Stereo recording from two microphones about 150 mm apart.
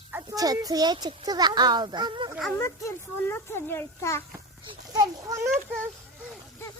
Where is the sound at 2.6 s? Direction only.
15° left (ahead or behind).